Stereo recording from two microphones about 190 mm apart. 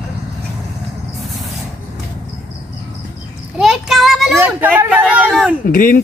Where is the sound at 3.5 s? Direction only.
Centre (ahead or behind).